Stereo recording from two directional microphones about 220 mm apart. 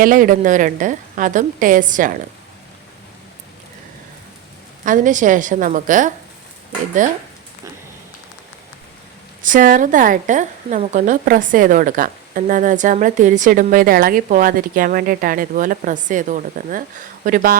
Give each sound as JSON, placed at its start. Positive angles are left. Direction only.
{"t": 0.0, "sound": "a woman's voice", "side_deg": -40}
{"t": 4.9, "sound": "a woman's voice", "side_deg": -35}
{"t": 9.4, "sound": "a woman's voice", "side_deg": -35}